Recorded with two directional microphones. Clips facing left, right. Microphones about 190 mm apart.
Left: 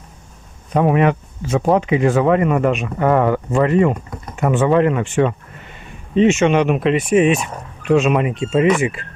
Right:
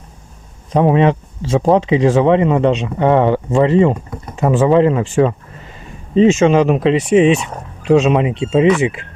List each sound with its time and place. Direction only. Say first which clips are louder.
0.7 s speech: right 3 dB; 25° right (ahead or behind)
6.7 s speech: right 3 dB; 30° right (ahead or behind)